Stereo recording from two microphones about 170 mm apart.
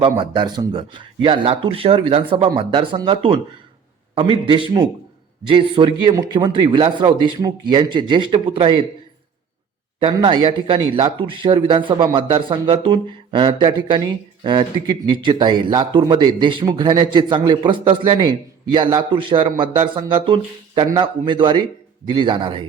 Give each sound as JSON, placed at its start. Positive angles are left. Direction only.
{"t": 0.0, "sound": "speech", "side_deg": -30}
{"t": 10.0, "sound": "speech", "side_deg": -30}